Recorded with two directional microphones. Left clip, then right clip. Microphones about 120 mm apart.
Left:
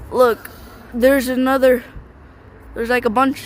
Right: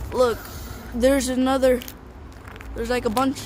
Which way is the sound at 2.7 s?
90° left.